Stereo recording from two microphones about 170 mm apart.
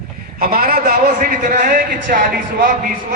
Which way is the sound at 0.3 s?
60° right (ahead or behind).